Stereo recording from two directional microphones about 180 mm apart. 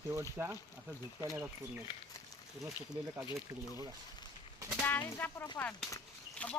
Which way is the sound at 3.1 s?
15° right (ahead or behind).